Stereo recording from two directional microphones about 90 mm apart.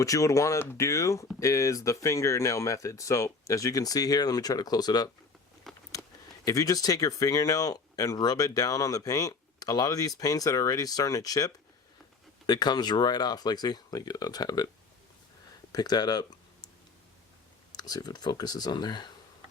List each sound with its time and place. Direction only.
0.0 s speech: 35° left (ahead or behind)
5.7 s a sound: 5° left (ahead or behind)
6.4 s speech: 40° left (ahead or behind)
15.7 s speech: 50° left (ahead or behind)
17.7 s speech: 50° left (ahead or behind)